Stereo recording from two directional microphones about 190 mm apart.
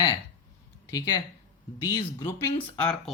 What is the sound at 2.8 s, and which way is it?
Speech, 5° left (ahead or behind).